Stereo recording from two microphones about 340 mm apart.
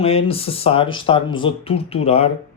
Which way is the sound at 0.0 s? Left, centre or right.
Centre.